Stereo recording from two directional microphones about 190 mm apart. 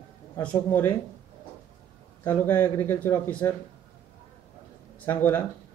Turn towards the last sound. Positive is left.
turn(degrees=10)  # may be behind; listen again after turning